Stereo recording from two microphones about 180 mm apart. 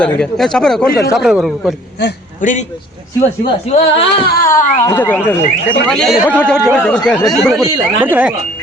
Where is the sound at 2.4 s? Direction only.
45° left (ahead or behind).